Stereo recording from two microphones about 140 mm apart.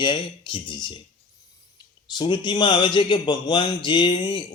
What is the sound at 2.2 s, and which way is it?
A man's voice, 35° left (ahead or behind).